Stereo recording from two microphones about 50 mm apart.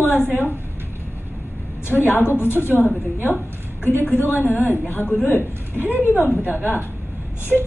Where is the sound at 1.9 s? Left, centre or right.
Left.